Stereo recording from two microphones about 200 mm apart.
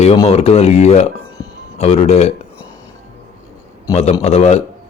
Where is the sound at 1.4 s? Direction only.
20° left (ahead or behind).